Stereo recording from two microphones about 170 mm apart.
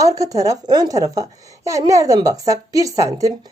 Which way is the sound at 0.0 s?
20° right (ahead or behind).